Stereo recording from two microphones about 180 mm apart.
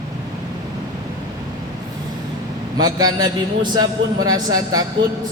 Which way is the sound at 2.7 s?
20° right (ahead or behind).